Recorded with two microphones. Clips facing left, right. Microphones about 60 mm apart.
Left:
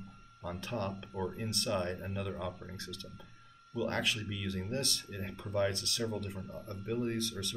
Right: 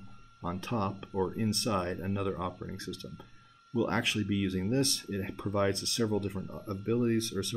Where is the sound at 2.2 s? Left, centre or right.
Right.